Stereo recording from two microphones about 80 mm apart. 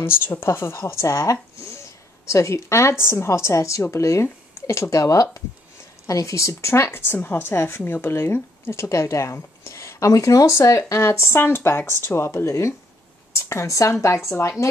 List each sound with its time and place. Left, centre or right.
0.0 s a woman's voice: left